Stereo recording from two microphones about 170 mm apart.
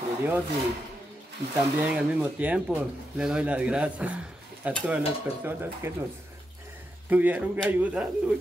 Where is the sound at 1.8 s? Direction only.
10° right (ahead or behind).